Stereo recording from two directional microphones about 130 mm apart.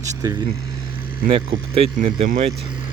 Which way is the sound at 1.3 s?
45° right (ahead or behind).